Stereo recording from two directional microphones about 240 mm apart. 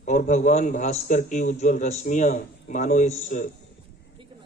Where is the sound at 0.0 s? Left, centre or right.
Left.